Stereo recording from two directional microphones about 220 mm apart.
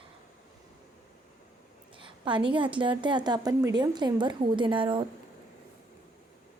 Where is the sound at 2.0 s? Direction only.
20° right (ahead or behind).